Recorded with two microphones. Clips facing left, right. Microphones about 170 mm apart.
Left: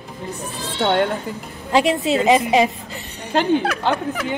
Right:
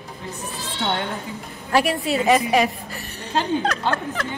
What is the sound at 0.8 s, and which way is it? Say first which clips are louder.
Speech: left 8 dB; 60° left (ahead or behind).